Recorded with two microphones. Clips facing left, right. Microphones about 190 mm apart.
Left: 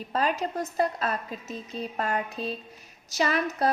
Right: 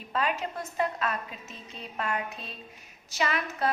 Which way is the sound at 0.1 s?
35° left (ahead or behind).